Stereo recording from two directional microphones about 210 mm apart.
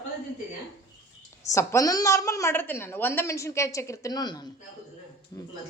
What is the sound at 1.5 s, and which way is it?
A woman's voice, 15° left (ahead or behind).